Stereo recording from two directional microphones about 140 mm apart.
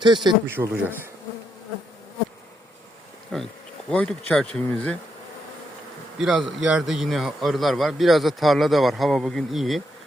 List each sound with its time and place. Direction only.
0.0 s speech: 30° right (ahead or behind)
0.4 s speech: 15° right (ahead or behind)
3.3 s a man's voice: 5° left (ahead or behind)
6.1 s a man's voice: 5° right (ahead or behind)